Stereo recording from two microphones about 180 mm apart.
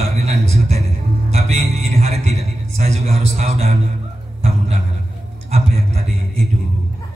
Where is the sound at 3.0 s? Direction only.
35° right (ahead or behind).